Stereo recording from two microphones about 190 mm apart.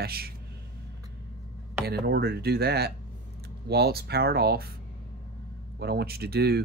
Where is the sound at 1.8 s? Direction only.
60° right (ahead or behind).